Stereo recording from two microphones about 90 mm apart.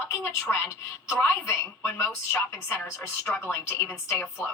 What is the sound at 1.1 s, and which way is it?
A woman's voice, 30° left (ahead or behind).